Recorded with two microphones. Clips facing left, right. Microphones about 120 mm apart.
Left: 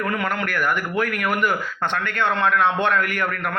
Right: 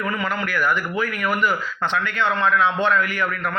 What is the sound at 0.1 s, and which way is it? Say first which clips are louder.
A man's voice: even; 60° left (ahead or behind).